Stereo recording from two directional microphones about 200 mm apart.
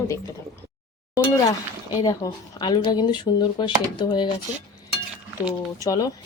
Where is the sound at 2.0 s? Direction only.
20° left (ahead or behind).